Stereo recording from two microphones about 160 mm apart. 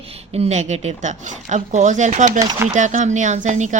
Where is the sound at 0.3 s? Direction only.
45° right (ahead or behind).